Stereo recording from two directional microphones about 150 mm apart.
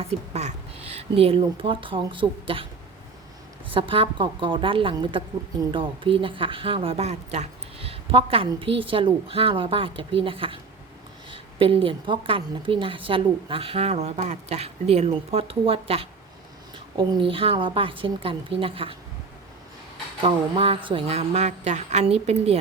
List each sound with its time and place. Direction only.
0.0 s speech: 45° right (ahead or behind)
3.7 s speech: 35° right (ahead or behind)
20.2 s a woman's voice: 40° right (ahead or behind)